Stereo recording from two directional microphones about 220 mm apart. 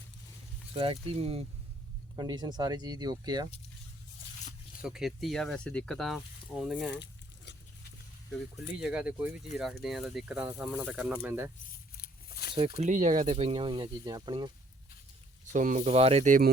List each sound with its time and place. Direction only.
0.7 s speech: 25° right (ahead or behind)
4.8 s speech: 5° right (ahead or behind)
6.8 s a sound: 55° left (ahead or behind)
8.5 s speech: 5° right (ahead or behind)
11.9 s a sound: 45° left (ahead or behind)
12.5 s speech: 25° right (ahead or behind)
15.5 s speech: 35° right (ahead or behind)